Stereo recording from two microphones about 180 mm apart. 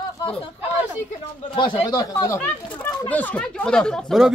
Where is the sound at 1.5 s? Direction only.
25° left (ahead or behind).